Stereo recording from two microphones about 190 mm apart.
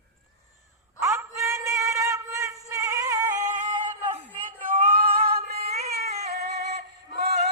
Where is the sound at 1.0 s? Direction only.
15° right (ahead or behind).